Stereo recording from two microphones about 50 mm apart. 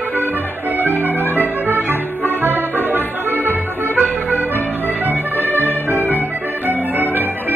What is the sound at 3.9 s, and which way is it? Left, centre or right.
Accordion, right.